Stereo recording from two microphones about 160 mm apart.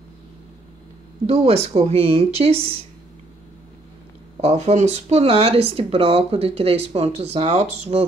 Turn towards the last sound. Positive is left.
turn(degrees=-40)  # may be behind; listen again after turning